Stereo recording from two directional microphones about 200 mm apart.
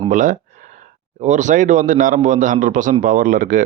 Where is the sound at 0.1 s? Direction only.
40° right (ahead or behind).